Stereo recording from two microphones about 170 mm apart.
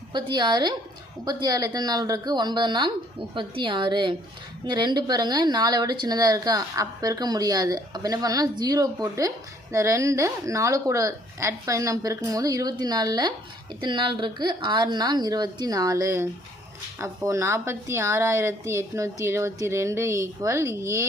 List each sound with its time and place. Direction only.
0.1 s a woman's voice: 25° right (ahead or behind)